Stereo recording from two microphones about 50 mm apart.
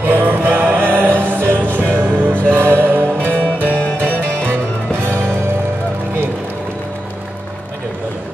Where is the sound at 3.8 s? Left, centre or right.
Left.